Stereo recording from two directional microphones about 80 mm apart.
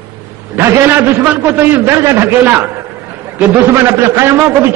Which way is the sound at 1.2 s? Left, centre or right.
Right.